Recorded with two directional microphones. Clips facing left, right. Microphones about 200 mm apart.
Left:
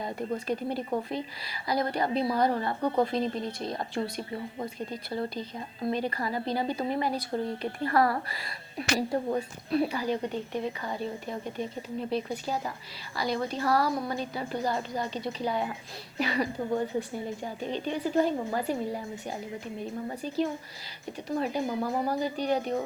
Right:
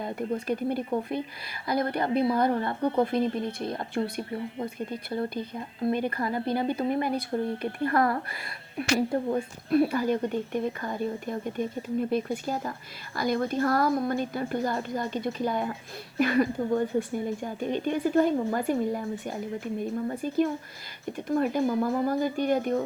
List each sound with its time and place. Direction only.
0.0 s a woman's voice: 55° right (ahead or behind)